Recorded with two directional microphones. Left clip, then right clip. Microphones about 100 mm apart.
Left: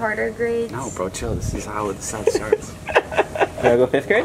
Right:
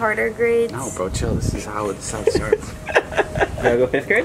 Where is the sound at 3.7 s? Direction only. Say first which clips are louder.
Left 1 dB; 35° left (ahead or behind).